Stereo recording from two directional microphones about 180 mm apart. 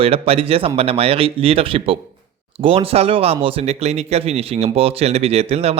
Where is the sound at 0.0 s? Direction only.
30° right (ahead or behind).